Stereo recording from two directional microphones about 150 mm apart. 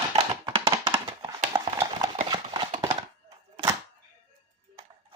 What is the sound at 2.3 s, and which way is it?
Horse, 30° right (ahead or behind).